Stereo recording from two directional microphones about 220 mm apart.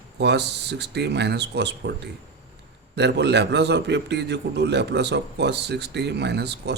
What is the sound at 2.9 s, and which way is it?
A man's voice, 50° right (ahead or behind).